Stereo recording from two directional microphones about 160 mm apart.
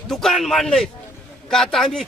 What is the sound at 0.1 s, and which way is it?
Speech, centre (ahead or behind).